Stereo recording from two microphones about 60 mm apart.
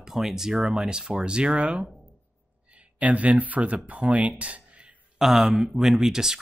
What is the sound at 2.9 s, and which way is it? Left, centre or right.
Speech, right.